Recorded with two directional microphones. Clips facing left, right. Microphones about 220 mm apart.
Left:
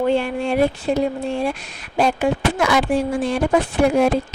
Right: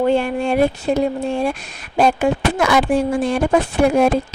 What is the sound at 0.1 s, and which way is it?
A woman's voice, 50° right (ahead or behind).